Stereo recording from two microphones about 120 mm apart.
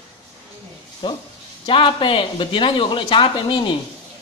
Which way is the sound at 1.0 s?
45° left (ahead or behind).